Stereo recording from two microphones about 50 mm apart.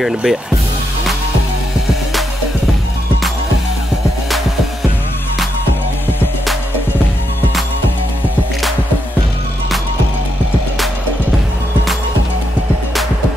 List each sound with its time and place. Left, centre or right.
0.0 s speech: centre